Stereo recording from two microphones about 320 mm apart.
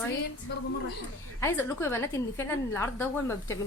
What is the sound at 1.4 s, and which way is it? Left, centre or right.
A woman's voice, centre.